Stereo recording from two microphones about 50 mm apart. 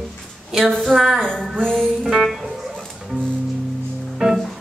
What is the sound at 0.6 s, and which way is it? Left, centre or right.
Speech, centre.